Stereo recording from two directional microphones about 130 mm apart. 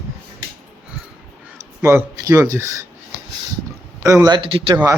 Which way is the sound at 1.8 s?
20° right (ahead or behind).